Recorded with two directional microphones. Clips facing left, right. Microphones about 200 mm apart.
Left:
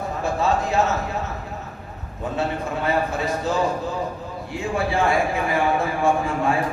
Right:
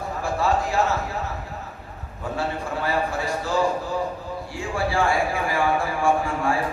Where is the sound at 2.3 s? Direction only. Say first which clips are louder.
Left 2 dB; 20° left (ahead or behind).